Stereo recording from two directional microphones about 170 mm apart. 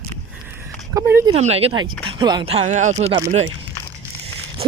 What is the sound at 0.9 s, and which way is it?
Speech, 15° right (ahead or behind).